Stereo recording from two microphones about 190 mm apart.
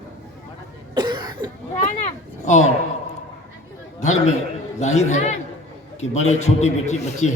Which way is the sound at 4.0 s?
40° left (ahead or behind).